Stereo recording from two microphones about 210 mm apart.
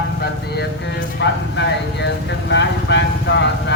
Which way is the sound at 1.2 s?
55° left (ahead or behind).